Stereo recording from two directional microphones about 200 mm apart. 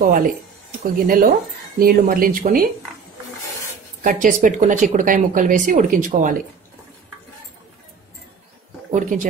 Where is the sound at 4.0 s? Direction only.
40° right (ahead or behind).